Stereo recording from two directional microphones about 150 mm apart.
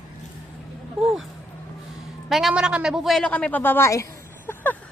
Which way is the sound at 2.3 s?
Centre (ahead or behind).